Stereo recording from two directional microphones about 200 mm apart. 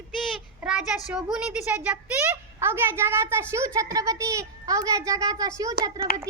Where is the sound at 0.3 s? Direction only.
5° right (ahead or behind).